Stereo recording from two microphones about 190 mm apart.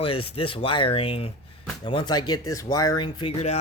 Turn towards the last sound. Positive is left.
turn(degrees=30)  # may be behind; listen again after turning